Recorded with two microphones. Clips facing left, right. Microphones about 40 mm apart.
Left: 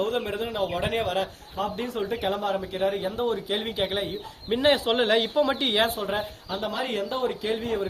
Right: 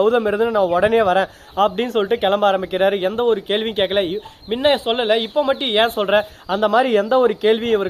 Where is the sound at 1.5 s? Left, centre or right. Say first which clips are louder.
Right 11 dB; right.